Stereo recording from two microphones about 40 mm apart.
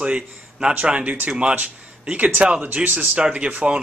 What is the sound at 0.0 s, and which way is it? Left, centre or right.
A man's voice, right.